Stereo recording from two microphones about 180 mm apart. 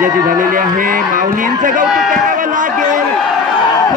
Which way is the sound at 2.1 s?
50° right (ahead or behind).